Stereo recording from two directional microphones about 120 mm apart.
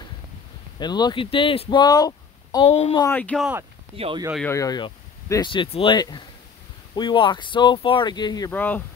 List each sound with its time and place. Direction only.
0.7 s speech: 35° left (ahead or behind)
2.6 s speech: 55° left (ahead or behind)
3.1 s speech: 15° left (ahead or behind)
3.9 s speech: 50° right (ahead or behind)
4.5 s speech: 30° left (ahead or behind)
5.7 s speech: 50° left (ahead or behind)
5.9 s speech: 35° left (ahead or behind)
8.5 s speech: 15° left (ahead or behind)